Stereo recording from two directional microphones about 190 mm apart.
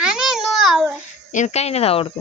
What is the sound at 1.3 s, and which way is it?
Speech, 40° left (ahead or behind).